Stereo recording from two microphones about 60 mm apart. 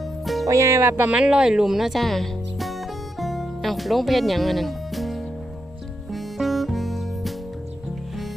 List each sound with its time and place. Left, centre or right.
0.0 s music: centre
0.4 s speech: right
0.9 s speech: right
1.1 s music: centre